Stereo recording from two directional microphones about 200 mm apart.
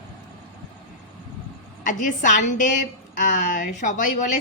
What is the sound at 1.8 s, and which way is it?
A woman's voice, 40° left (ahead or behind).